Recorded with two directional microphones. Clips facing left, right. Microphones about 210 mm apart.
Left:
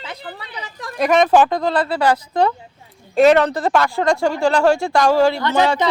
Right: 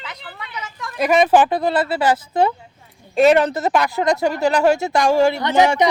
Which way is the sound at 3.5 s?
20° right (ahead or behind).